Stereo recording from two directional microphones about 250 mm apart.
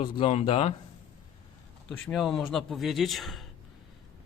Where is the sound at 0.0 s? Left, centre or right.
Left.